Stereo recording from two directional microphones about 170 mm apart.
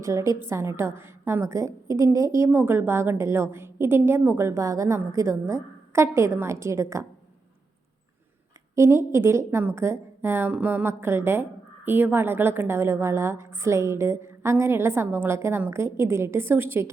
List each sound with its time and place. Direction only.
0.0 s a woman's voice: 20° right (ahead or behind)
8.7 s a woman's voice: 15° right (ahead or behind)